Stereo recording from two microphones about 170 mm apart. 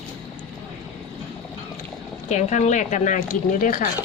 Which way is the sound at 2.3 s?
45° left (ahead or behind).